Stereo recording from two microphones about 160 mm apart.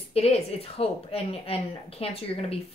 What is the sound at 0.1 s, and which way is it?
A woman's voice, 40° left (ahead or behind).